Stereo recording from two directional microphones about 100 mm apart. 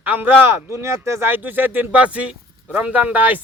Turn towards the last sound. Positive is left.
turn(degrees=-15)  # may be behind; listen again after turning